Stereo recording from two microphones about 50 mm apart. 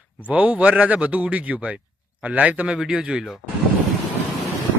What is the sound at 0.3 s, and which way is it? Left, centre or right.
Speech, right.